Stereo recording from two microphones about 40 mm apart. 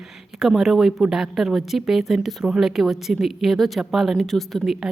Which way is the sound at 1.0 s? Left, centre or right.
Centre.